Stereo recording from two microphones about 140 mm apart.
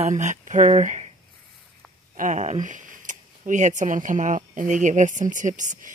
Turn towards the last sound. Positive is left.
turn(degrees=-65)  # may be behind; listen again after turning